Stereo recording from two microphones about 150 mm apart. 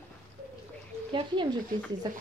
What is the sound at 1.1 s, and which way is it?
Speech, 30° right (ahead or behind).